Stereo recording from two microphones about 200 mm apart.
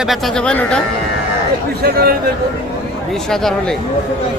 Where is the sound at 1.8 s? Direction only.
50° right (ahead or behind).